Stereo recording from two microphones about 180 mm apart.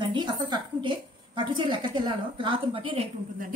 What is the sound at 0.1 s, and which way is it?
A woman's voice, 25° right (ahead or behind).